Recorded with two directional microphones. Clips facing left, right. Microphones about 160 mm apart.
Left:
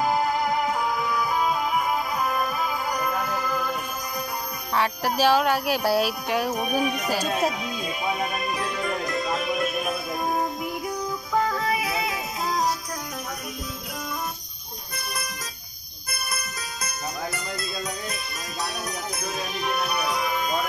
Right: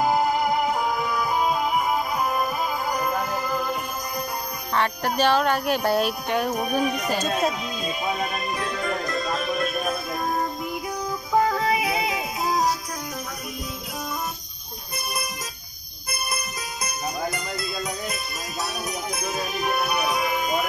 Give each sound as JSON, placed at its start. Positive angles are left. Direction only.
{"t": 0.0, "sound": "music", "side_deg": -10}
{"t": 4.7, "sound": "music", "side_deg": 5}
{"t": 11.5, "sound": "music", "side_deg": -15}
{"t": 16.8, "sound": "music", "side_deg": -10}